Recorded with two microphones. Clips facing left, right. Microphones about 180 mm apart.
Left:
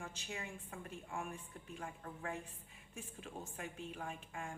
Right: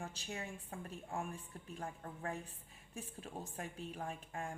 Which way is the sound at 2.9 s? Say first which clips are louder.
Right 2 dB; 35° right (ahead or behind).